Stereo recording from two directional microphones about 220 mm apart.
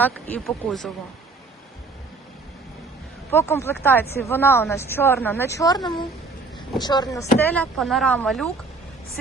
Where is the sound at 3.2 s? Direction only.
10° left (ahead or behind).